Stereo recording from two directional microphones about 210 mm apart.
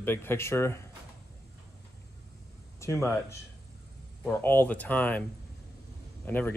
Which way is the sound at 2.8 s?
15° left (ahead or behind).